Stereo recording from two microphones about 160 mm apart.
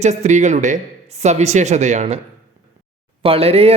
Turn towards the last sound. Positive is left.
turn(degrees=-40)  # may be behind; listen again after turning